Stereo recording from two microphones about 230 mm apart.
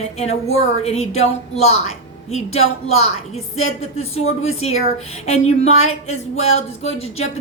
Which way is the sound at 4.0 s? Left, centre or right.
Left.